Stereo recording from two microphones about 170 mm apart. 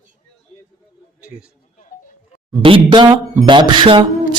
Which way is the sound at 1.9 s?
55° left (ahead or behind).